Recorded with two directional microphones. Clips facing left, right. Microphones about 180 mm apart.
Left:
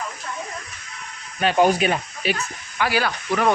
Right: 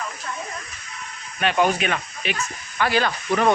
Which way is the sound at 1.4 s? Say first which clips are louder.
Left 3 dB; 35° left (ahead or behind).